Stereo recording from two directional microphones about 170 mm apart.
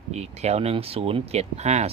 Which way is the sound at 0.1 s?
40° right (ahead or behind).